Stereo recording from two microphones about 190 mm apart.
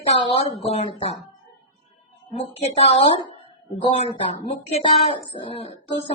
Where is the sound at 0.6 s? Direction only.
30° left (ahead or behind).